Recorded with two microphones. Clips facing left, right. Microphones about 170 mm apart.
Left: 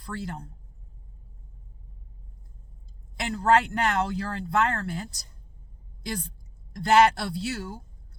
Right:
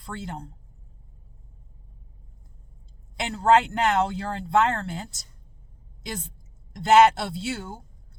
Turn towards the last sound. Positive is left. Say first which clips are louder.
# even
turn(degrees=-25)  # may be behind; listen again after turning